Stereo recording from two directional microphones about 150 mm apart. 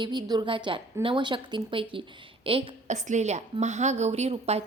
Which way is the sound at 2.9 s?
50° right (ahead or behind).